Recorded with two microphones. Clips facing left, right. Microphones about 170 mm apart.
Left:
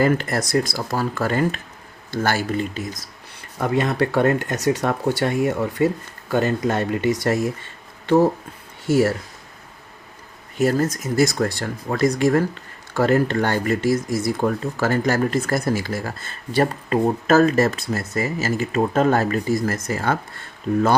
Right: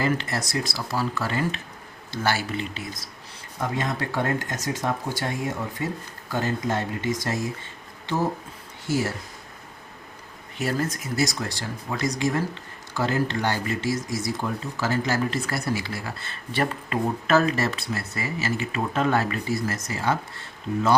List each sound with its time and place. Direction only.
0.0 s speech: 50° left (ahead or behind)
3.6 s speech: 65° left (ahead or behind)
10.6 s speech: 45° left (ahead or behind)
20.7 s speech: 60° left (ahead or behind)